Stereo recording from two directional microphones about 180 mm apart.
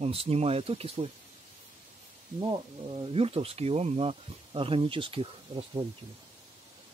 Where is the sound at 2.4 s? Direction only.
25° right (ahead or behind).